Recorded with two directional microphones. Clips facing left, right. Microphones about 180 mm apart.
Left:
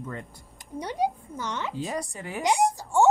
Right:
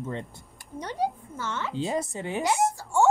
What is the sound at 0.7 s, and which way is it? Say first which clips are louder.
Speech: left 2 dB; 10° left (ahead or behind).